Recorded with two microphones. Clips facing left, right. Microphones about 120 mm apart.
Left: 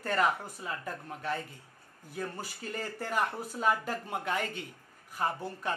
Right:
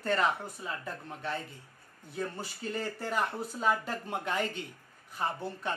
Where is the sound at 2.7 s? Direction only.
5° left (ahead or behind).